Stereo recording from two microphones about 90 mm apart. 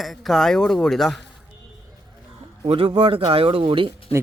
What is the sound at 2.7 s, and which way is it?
Speech, 90° right.